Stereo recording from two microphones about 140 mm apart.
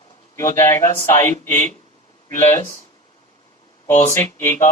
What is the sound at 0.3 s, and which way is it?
Speech, 20° left (ahead or behind).